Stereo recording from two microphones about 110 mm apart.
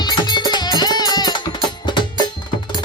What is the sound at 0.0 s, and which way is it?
Music, 40° left (ahead or behind).